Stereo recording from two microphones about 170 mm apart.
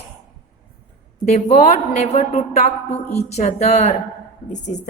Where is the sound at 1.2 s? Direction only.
40° left (ahead or behind).